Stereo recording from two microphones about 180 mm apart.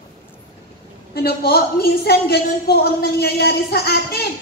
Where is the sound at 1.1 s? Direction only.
60° left (ahead or behind).